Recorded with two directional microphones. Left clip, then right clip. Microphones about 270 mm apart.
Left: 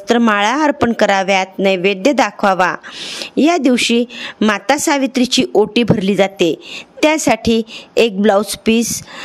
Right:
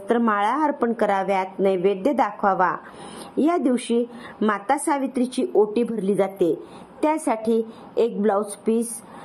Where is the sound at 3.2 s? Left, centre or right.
Left.